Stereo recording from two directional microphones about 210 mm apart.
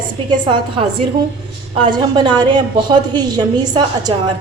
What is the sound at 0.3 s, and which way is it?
A woman's voice, 20° right (ahead or behind).